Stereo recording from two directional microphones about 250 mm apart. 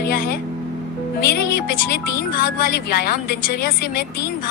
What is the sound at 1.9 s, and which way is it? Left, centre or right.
A woman's voice, left.